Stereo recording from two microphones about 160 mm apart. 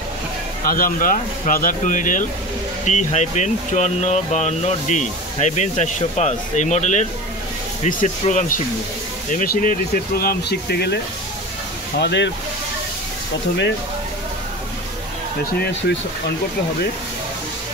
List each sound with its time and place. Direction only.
0.7 s speech: 60° left (ahead or behind); by 11.0 s 90° left
12.0 s speech: 90° left